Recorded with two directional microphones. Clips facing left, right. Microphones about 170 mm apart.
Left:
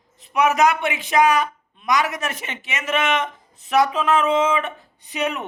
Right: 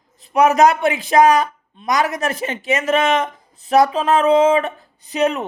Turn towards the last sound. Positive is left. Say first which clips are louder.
# right 6 dB
turn(degrees=-35)  # may be behind; listen again after turning